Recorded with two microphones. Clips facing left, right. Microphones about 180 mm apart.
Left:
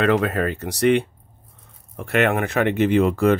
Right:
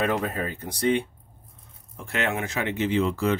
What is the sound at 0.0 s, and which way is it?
Speech, 75° left (ahead or behind).